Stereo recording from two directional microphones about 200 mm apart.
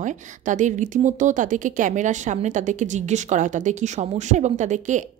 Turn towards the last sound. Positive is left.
turn(degrees=-40)  # may be behind; listen again after turning